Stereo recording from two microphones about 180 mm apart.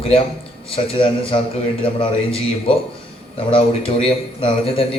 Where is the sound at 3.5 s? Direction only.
30° left (ahead or behind).